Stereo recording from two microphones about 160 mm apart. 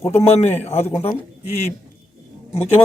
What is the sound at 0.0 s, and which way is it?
Speech, 20° left (ahead or behind).